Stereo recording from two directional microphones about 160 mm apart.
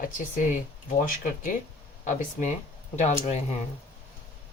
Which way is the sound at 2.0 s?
50° left (ahead or behind).